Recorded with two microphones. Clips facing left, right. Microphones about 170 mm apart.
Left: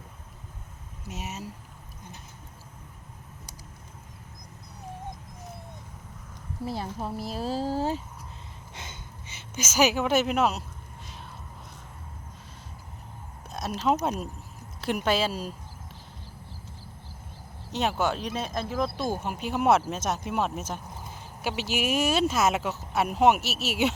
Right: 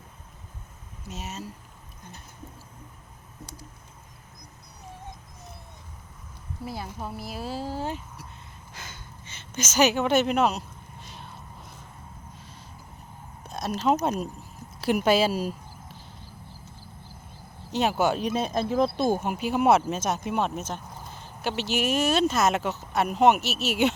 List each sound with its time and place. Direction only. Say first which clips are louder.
1.0 s speech: even; 15° left (ahead or behind)
6.7 s speech: left 3 dB; 35° left (ahead or behind)
8.7 s gasp: even; 25° left (ahead or behind)
9.4 s speech: right 1 dB; 10° left (ahead or behind)
11.0 s a sound: right 1 dB; centre (ahead or behind)
13.5 s a sound: right 2 dB; centre (ahead or behind)
14.0 s speech: right 2 dB; centre (ahead or behind)
17.7 s speech: right 3 dB; centre (ahead or behind)